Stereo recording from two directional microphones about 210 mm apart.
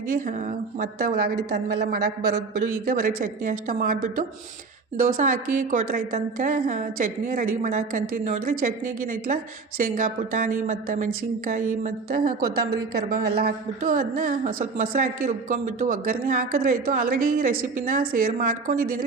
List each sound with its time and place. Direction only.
0.1 s a woman's voice: 35° right (ahead or behind)